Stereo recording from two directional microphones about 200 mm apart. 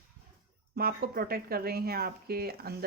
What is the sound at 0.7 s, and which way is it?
Speech, 50° right (ahead or behind).